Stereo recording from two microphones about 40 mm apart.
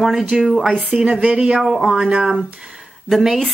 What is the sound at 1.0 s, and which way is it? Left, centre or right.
Speech, right.